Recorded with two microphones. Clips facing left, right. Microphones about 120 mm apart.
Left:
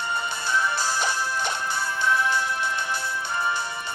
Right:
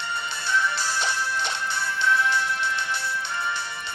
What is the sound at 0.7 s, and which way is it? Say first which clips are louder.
Music: left 2 dB; 45° left (ahead or behind).